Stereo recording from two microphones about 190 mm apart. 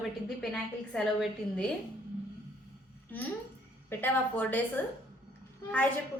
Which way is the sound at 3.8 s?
10° left (ahead or behind).